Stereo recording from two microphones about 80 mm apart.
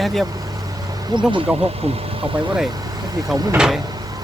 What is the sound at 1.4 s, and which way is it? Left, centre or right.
Speech, centre.